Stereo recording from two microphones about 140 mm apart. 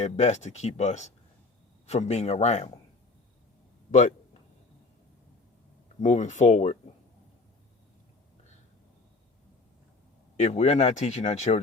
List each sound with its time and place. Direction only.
0.0 s speech: 55° left (ahead or behind)
6.0 s speech: 60° left (ahead or behind)
10.3 s speech: 50° left (ahead or behind)